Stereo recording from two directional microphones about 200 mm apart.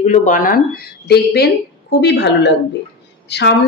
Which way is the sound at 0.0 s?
35° left (ahead or behind).